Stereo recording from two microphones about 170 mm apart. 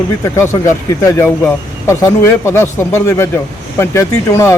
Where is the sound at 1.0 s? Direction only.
20° left (ahead or behind).